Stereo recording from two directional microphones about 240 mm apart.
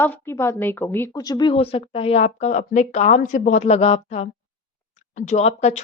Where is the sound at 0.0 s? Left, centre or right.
Centre.